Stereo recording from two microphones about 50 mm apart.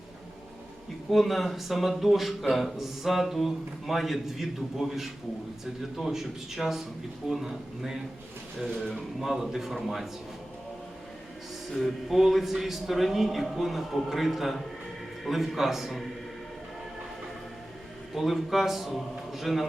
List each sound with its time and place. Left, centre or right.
1.1 s a man's voice: centre
11.7 s a man's voice: centre
18.1 s a man's voice: centre